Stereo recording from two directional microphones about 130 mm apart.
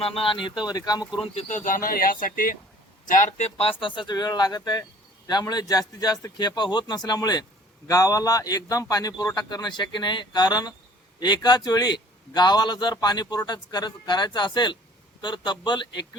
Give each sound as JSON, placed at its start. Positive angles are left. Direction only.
{"t": 0.0, "sound": "speech", "side_deg": 45}
{"t": 0.6, "sound": "a man's voice", "side_deg": 30}
{"t": 1.4, "sound": "speech", "side_deg": 70}
{"t": 3.1, "sound": "a man's voice", "side_deg": 75}